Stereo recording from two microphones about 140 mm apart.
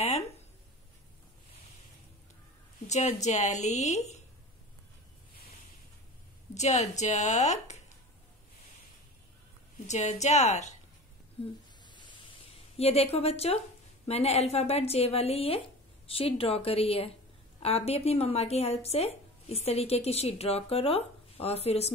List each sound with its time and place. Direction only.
2.9 s a woman's voice: 55° left (ahead or behind)
6.5 s a woman's voice: 55° left (ahead or behind)
9.8 s a woman's voice: 55° left (ahead or behind)
11.8 s a sound: 35° left (ahead or behind)
12.7 s speech: 45° left (ahead or behind)